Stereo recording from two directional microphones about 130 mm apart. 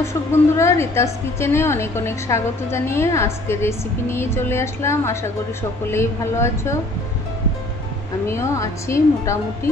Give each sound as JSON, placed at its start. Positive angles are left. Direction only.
{"t": 0.0, "sound": "a woman's voice", "side_deg": 20}
{"t": 8.3, "sound": "a woman's voice", "side_deg": 20}